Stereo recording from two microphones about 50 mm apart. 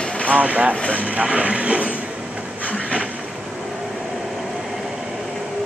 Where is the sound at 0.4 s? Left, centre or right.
Right.